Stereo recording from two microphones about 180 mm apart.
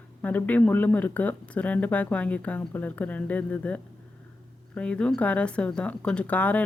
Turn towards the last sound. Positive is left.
turn(degrees=10)  # may be behind; listen again after turning